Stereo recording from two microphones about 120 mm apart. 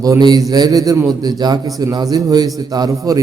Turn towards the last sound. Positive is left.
turn(degrees=-30)  # may be behind; listen again after turning